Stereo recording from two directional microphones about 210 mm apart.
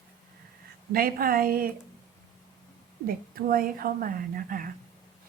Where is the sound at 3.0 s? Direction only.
45° right (ahead or behind).